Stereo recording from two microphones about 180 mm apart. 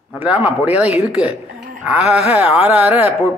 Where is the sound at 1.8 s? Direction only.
5° right (ahead or behind).